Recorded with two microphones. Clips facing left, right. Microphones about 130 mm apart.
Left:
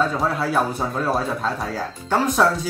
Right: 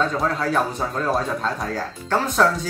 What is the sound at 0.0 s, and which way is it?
A man's voice, 5° left (ahead or behind).